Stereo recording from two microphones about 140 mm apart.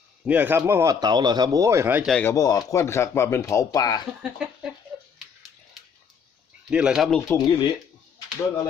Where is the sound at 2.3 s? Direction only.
25° left (ahead or behind).